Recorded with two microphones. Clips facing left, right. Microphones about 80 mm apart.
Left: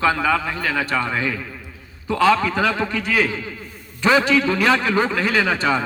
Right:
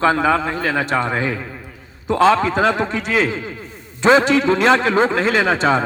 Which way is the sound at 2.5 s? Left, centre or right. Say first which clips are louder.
Right 3 dB; right.